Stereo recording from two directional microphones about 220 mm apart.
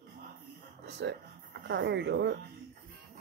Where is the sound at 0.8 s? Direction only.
50° right (ahead or behind).